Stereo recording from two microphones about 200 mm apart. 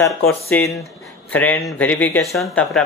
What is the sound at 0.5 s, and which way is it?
A man's voice, 5° left (ahead or behind).